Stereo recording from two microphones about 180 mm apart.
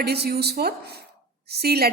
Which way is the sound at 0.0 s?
65° right (ahead or behind).